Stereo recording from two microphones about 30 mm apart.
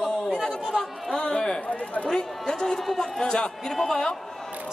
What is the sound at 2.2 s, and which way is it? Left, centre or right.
A man's voice, centre.